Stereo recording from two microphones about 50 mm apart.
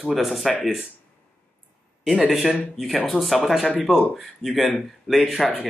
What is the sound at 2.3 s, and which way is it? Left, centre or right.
Speech, centre.